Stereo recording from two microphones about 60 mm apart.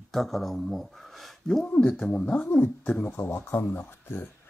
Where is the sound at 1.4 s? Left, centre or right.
Centre.